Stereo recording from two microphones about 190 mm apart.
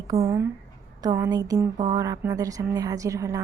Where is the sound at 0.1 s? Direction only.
15° right (ahead or behind).